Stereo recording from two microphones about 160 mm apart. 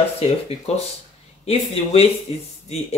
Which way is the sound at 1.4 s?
40° left (ahead or behind).